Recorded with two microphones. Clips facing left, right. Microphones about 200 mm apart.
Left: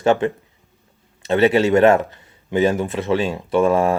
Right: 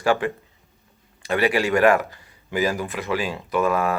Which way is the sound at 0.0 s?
25° left (ahead or behind).